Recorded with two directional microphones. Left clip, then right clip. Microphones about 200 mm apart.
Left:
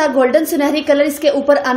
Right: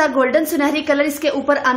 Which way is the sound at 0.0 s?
15° left (ahead or behind).